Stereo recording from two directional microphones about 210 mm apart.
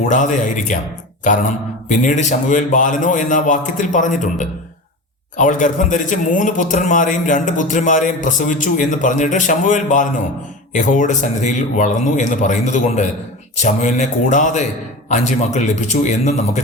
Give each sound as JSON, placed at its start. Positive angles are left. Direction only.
{"t": 0.0, "sound": "speech", "side_deg": 35}